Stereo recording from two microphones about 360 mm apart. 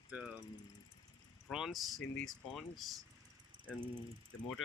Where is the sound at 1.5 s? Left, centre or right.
Centre.